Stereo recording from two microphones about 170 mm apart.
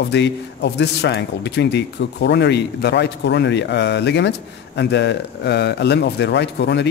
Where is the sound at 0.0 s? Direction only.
90° left.